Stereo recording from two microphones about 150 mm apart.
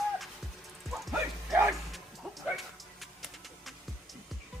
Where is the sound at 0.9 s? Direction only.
Centre (ahead or behind).